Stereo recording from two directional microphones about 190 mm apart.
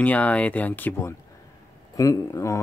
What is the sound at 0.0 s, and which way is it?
Speech, 5° left (ahead or behind).